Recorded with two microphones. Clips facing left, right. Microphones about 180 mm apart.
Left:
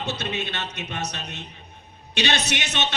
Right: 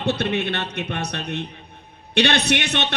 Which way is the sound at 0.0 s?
60° right (ahead or behind).